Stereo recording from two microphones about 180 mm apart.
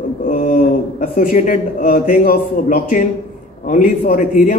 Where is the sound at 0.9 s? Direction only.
45° left (ahead or behind).